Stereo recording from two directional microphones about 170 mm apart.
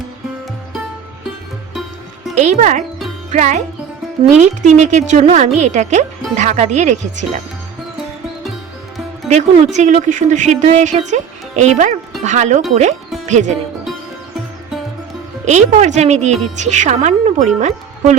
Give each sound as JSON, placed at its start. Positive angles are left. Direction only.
{"t": 2.4, "sound": "speech", "side_deg": -45}
{"t": 9.7, "sound": "speech", "side_deg": -45}
{"t": 15.4, "sound": "speech", "side_deg": -45}